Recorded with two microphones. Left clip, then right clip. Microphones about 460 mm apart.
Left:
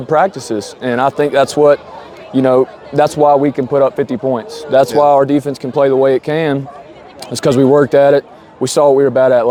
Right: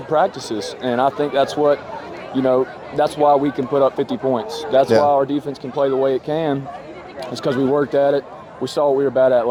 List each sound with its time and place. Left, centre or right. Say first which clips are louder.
0.1 s speech: left 5 dB; left
5.0 s speech: left 7 dB; left
7.3 s speech: left 8 dB; left